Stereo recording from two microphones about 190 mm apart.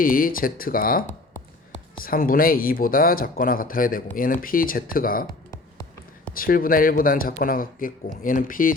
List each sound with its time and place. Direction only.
0.0 s speech: 50° left (ahead or behind)
2.0 s speech: 50° left (ahead or behind)
6.3 s speech: 50° left (ahead or behind)